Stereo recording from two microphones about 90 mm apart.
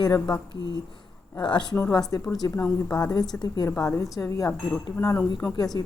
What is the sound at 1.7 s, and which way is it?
Speech, 30° left (ahead or behind).